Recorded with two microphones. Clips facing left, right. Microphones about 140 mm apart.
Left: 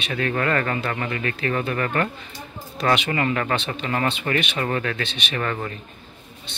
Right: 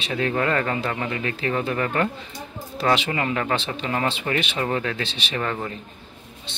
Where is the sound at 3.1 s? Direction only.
15° right (ahead or behind).